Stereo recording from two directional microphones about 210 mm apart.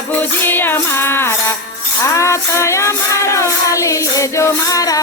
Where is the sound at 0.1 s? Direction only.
10° left (ahead or behind).